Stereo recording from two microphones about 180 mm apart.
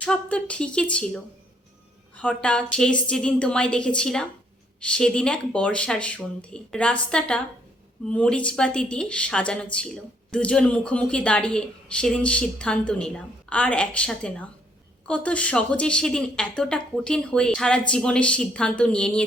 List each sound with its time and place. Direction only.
0.0 s speech: 5° left (ahead or behind)